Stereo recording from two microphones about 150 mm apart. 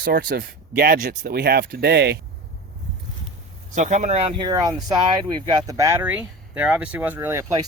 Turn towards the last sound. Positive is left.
turn(degrees=-20)  # may be behind; listen again after turning